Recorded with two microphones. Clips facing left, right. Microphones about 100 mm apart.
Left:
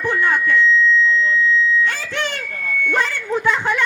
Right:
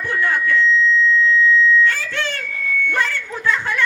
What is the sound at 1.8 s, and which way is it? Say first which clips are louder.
Speech: right 2 dB; 15° left (ahead or behind).